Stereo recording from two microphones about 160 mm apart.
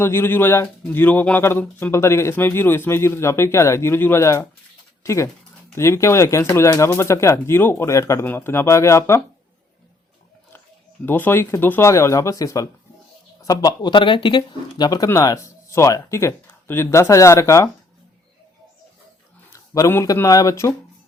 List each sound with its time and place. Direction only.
0.0 s speech: 15° left (ahead or behind)
11.0 s speech: 10° left (ahead or behind)
19.5 s speech: 20° left (ahead or behind)